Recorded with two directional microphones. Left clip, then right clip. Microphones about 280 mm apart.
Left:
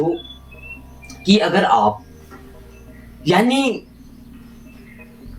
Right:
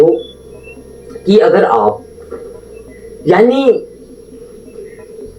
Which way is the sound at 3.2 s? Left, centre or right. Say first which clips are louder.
Right 8 dB; left.